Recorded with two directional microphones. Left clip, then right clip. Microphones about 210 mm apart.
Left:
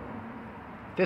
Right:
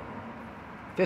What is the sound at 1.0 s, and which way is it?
Speech, 5° right (ahead or behind).